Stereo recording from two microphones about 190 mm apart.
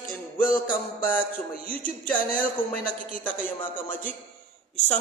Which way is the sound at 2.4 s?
10° left (ahead or behind).